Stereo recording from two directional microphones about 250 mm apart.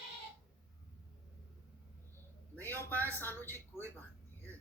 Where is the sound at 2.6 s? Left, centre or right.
Centre.